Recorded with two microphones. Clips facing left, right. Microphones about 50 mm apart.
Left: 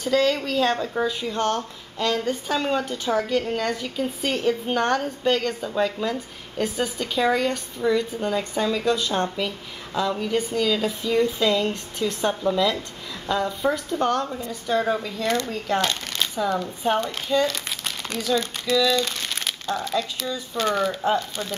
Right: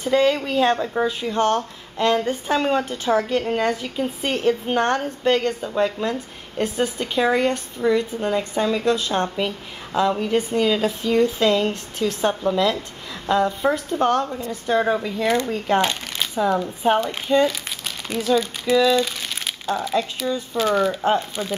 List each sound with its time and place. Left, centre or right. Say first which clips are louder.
0.0 s a woman's voice: right 3 dB; centre
11.1 s a woman's voice: right 3 dB; centre
14.7 s a woman's voice: right 3 dB; right
17.5 s crumpling: right 1 dB; centre
18.7 s speech: right 4 dB; centre
20.5 s speech: right 3 dB; centre
21.4 s a woman's voice: right 3 dB; centre